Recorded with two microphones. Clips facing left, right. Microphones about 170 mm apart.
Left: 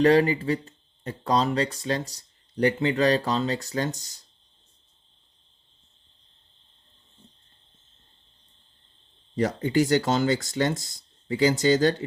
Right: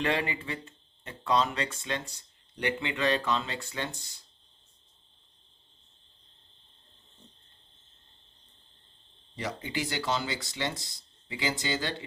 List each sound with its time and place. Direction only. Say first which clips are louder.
0.0 s speech: left 11 dB; 40° left (ahead or behind)
9.3 s speech: left 11 dB; 45° left (ahead or behind)